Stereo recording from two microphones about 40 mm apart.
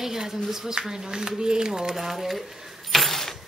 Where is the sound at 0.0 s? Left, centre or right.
Centre.